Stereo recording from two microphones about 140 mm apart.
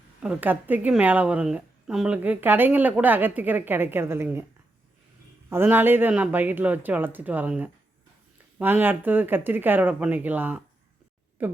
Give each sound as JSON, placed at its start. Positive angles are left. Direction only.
{"t": 0.2, "sound": "a woman's voice", "side_deg": -10}
{"t": 5.5, "sound": "a woman's voice", "side_deg": -15}